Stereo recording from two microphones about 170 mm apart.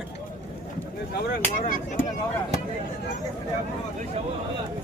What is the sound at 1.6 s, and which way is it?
Speech, 50° left (ahead or behind).